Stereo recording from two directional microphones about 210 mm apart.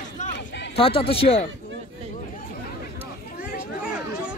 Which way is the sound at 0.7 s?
25° left (ahead or behind).